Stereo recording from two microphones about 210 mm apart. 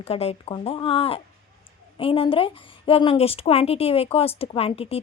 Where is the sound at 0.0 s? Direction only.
30° left (ahead or behind).